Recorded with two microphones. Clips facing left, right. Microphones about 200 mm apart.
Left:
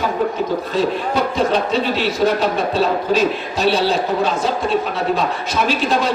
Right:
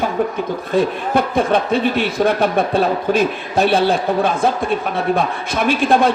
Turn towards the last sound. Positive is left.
turn(degrees=-55)  # may be behind; listen again after turning